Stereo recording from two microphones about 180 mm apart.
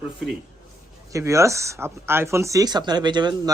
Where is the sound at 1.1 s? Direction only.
15° right (ahead or behind).